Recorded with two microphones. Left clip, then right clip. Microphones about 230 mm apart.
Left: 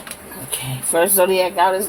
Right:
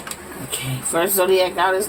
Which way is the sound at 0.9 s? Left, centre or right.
Left.